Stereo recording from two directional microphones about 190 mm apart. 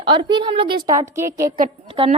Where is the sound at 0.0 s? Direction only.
25° right (ahead or behind).